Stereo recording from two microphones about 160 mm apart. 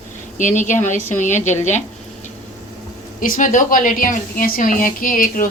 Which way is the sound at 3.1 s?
55° left (ahead or behind).